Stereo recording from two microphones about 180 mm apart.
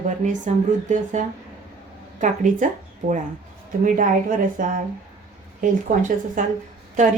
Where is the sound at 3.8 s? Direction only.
50° right (ahead or behind).